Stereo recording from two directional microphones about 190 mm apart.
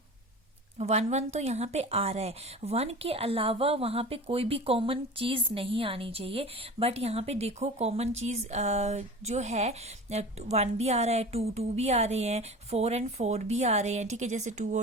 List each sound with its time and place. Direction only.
0.8 s a woman's voice: 35° right (ahead or behind)